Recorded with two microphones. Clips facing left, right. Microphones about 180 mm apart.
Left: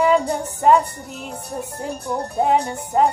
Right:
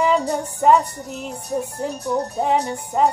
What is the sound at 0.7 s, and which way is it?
Music, 60° left (ahead or behind).